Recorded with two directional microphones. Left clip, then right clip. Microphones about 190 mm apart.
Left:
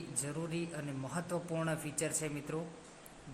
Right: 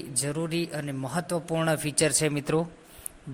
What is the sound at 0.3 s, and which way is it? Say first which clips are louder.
A man's voice: right 11 dB; 30° right (ahead or behind).